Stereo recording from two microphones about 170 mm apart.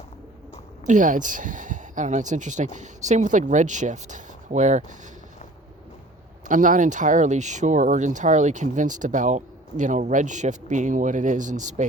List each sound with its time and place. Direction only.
0.9 s speech: 50° right (ahead or behind)
6.5 s speech: 50° right (ahead or behind)